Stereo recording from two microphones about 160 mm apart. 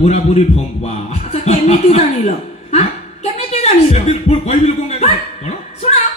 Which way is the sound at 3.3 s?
40° left (ahead or behind).